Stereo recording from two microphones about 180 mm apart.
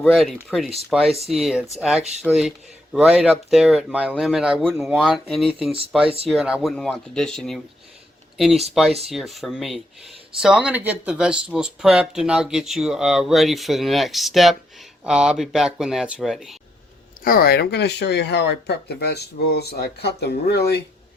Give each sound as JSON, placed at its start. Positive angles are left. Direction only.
{"t": 0.0, "sound": "speech", "side_deg": 0}
{"t": 9.0, "sound": "speech", "side_deg": 0}
{"t": 17.2, "sound": "speech", "side_deg": 55}